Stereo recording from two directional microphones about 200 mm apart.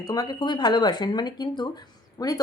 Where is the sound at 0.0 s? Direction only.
20° left (ahead or behind).